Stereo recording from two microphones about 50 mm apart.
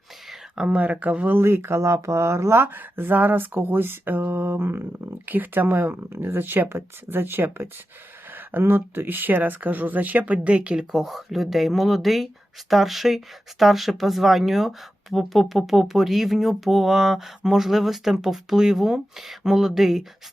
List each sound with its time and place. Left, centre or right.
0.5 s speech: centre
0.8 s speech: right
1.4 s speech: right; by 11.0 s centre
11.0 s speech: centre